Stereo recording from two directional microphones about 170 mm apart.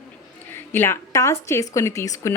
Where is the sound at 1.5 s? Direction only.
15° left (ahead or behind).